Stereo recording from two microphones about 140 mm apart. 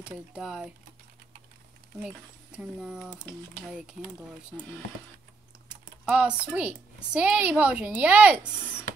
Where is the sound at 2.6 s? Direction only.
5° right (ahead or behind).